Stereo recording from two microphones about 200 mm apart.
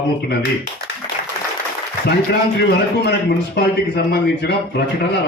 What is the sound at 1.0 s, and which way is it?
Applause, 20° left (ahead or behind).